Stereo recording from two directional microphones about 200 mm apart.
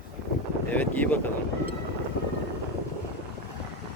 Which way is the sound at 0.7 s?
10° left (ahead or behind).